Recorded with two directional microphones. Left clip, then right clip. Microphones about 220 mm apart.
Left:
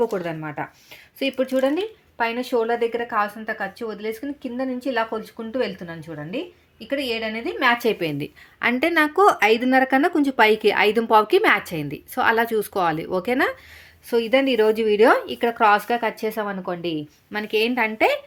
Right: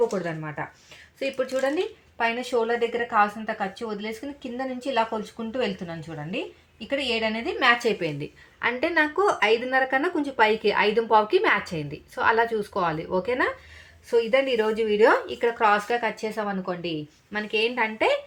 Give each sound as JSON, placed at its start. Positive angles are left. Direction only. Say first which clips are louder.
{"t": 0.1, "sound": "speech", "louder": "left 3 dB", "side_deg": 50}
{"t": 17.3, "sound": "speech", "louder": "left 3 dB", "side_deg": 50}